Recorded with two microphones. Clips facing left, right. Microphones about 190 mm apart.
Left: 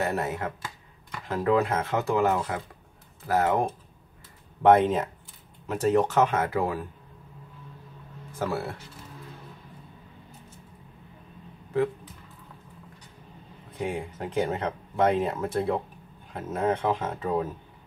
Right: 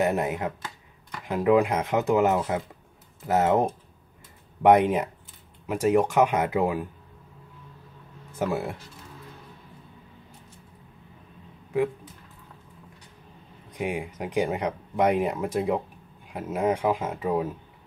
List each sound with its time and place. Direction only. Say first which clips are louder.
0.0 s speech: right 3 dB; 15° right (ahead or behind)
4.6 s speech: right 1 dB; 15° right (ahead or behind)
8.4 s speech: right 2 dB; 15° right (ahead or behind)
13.7 s speech: right 1 dB; 15° right (ahead or behind)